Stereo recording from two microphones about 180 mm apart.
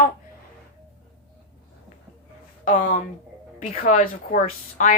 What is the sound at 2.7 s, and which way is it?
Speech, 45° left (ahead or behind).